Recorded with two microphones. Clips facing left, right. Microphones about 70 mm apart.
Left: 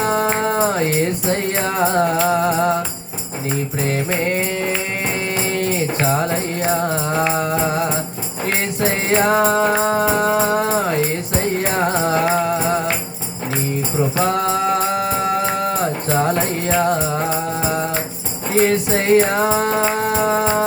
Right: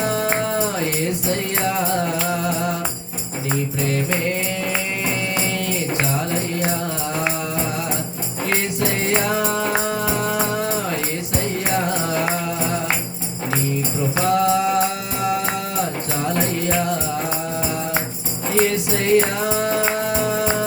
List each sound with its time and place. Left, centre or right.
0.0 s music: left
5.5 s music: left
8.9 s music: left
14.3 s music: left
15.8 s music: left
18.7 s music: left